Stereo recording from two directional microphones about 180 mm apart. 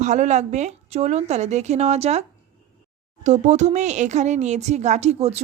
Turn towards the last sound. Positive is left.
turn(degrees=-35)  # may be behind; listen again after turning